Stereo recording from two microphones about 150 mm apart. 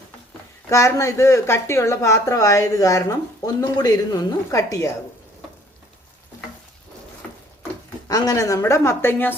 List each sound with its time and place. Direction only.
0.7 s speech: 20° left (ahead or behind)
8.0 s speech: 25° left (ahead or behind)